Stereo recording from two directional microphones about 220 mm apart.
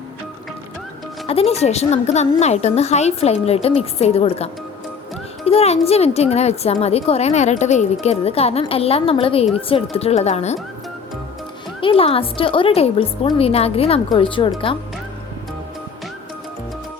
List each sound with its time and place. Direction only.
1.3 s a woman's voice: 25° left (ahead or behind)
5.5 s a woman's voice: 30° left (ahead or behind)
11.8 s a woman's voice: 25° left (ahead or behind)